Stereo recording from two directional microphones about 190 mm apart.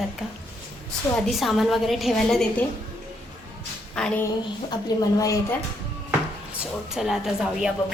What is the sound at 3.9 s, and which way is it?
Speech, 5° left (ahead or behind).